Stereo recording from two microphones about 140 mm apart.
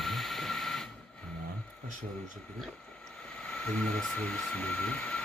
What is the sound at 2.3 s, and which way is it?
Speech, 5° left (ahead or behind).